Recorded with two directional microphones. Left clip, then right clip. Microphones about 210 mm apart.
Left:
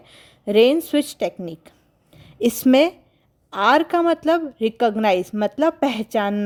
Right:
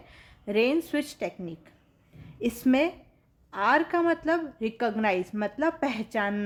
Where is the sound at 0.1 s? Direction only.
40° left (ahead or behind).